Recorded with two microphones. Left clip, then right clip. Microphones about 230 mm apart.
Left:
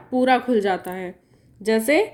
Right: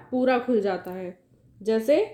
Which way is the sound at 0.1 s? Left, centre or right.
Left.